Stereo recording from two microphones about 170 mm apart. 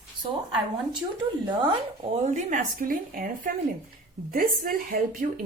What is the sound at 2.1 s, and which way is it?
A woman's voice, 45° right (ahead or behind).